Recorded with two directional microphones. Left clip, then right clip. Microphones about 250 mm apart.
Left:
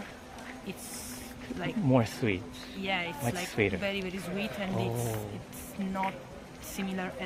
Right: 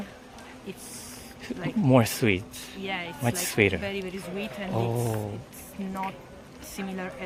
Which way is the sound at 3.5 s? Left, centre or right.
Right.